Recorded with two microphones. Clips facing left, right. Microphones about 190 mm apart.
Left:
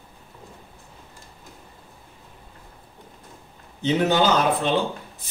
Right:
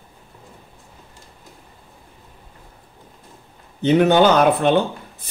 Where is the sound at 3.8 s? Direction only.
60° right (ahead or behind).